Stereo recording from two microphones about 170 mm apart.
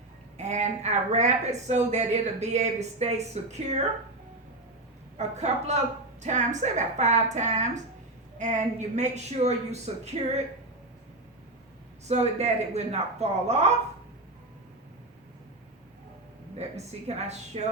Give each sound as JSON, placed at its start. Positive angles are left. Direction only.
{"t": 0.3, "sound": "a woman's voice", "side_deg": -45}
{"t": 5.1, "sound": "a woman's voice", "side_deg": -40}
{"t": 12.0, "sound": "a woman's voice", "side_deg": -40}
{"t": 16.6, "sound": "a woman's voice", "side_deg": -40}